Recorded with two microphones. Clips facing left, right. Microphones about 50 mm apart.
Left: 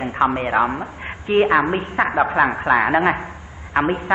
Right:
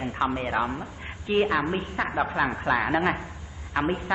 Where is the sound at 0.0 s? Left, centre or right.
Left.